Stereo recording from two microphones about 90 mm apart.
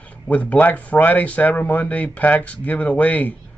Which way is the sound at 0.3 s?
15° left (ahead or behind).